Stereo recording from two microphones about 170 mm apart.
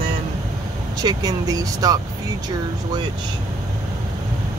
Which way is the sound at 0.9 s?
20° right (ahead or behind).